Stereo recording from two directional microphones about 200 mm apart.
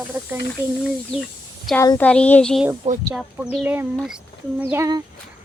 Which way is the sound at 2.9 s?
35° right (ahead or behind).